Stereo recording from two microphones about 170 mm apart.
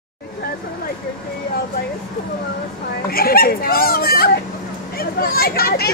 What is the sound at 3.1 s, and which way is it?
A woman's voice, 60° left (ahead or behind).